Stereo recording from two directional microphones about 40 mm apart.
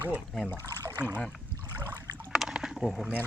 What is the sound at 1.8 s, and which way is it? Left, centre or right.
Boat, right.